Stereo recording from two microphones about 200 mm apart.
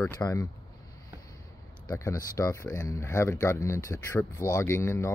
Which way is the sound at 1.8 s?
15° left (ahead or behind).